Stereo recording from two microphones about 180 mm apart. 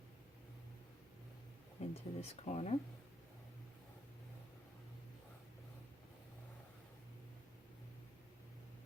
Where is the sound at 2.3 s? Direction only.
35° left (ahead or behind).